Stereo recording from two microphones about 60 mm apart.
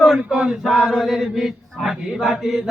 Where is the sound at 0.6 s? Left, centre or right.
Centre.